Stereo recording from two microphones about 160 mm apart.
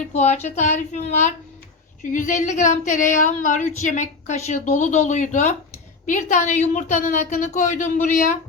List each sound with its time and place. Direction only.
0.1 s a woman's voice: 45° left (ahead or behind)